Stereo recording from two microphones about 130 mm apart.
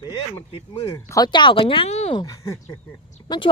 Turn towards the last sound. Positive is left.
turn(degrees=35)  # may be behind; listen again after turning